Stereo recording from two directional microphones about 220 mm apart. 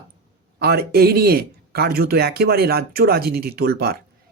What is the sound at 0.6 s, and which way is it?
Speech, 45° right (ahead or behind).